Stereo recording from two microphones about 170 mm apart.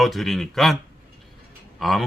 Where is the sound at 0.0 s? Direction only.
Centre (ahead or behind).